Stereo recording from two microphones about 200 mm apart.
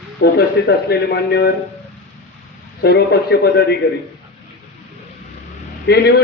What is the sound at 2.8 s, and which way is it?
Speech, 55° left (ahead or behind).